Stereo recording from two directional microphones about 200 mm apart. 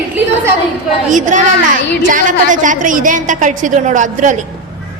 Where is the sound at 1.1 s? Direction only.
40° right (ahead or behind).